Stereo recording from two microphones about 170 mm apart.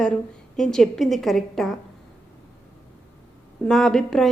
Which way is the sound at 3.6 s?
Centre (ahead or behind).